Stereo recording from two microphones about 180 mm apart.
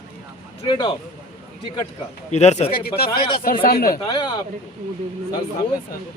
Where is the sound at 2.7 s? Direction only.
60° left (ahead or behind).